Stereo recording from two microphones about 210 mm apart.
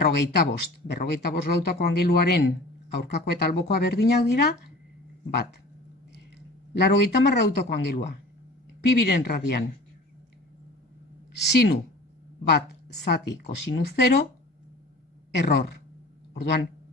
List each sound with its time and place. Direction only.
0.0 s speech: 50° left (ahead or behind)
6.7 s speech: 55° left (ahead or behind)
11.3 s speech: 50° left (ahead or behind)
15.3 s a woman's voice: 50° left (ahead or behind)